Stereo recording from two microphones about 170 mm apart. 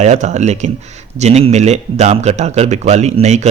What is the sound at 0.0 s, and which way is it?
A man's voice, 45° right (ahead or behind).